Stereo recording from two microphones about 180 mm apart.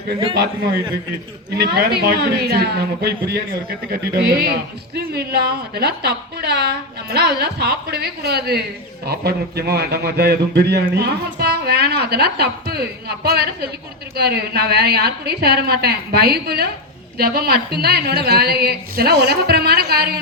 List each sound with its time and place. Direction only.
1.5 s speech: 65° right (ahead or behind)